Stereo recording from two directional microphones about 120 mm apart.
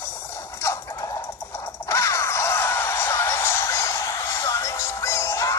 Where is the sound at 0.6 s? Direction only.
25° left (ahead or behind).